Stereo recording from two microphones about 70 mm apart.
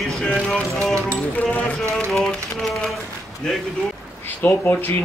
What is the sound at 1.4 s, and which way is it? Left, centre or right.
Speech, left.